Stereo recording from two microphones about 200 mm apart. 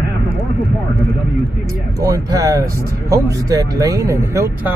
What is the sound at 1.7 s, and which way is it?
Speech, 15° right (ahead or behind).